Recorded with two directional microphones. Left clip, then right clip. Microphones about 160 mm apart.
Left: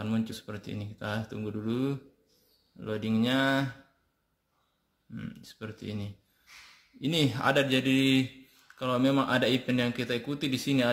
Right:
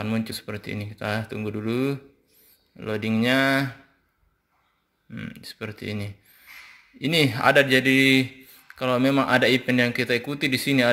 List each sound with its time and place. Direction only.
0.0 s speech: 20° right (ahead or behind)
5.1 s speech: 25° right (ahead or behind)